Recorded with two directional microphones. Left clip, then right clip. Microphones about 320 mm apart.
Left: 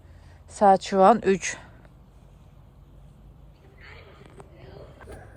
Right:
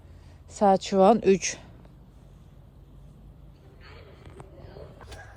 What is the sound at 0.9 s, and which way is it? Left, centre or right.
Speech, centre.